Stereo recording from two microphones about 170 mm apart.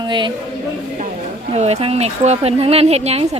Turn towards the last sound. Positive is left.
turn(degrees=-35)  # may be behind; listen again after turning